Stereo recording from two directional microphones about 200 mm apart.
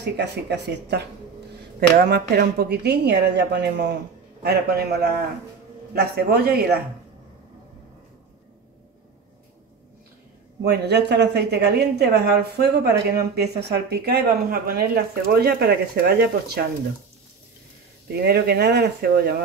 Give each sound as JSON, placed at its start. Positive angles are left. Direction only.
{"t": 0.0, "sound": "speech", "side_deg": -60}
{"t": 10.6, "sound": "speech", "side_deg": -55}
{"t": 18.1, "sound": "speech", "side_deg": -55}